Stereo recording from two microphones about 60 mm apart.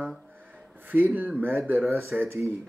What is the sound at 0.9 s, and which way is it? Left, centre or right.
Speech, right.